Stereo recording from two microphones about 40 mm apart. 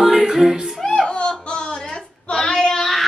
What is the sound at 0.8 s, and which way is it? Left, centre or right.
Laughter, centre.